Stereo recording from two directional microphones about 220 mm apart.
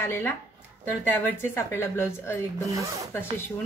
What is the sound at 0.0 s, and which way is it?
A woman's voice, 10° left (ahead or behind).